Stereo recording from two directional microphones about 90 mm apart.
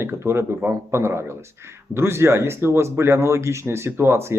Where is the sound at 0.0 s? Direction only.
30° right (ahead or behind).